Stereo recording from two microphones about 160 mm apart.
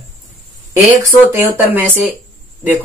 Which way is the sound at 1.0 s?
15° right (ahead or behind).